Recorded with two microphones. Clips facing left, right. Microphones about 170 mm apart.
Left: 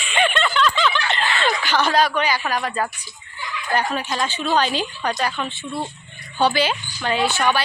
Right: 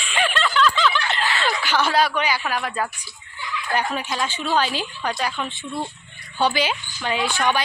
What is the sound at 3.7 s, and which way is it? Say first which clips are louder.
A woman's voice: left 2 dB; 10° right (ahead or behind).